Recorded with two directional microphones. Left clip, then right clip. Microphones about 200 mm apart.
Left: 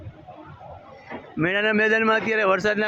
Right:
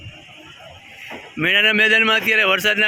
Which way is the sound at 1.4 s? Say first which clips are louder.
Right 6 dB; 10° right (ahead or behind).